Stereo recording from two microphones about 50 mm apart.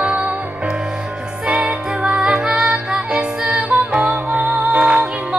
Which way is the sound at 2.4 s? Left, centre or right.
Centre.